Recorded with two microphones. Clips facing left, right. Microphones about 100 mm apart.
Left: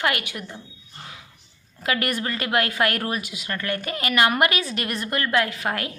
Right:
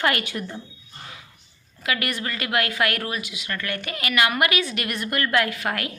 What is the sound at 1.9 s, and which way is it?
A woman's voice, 40° left (ahead or behind).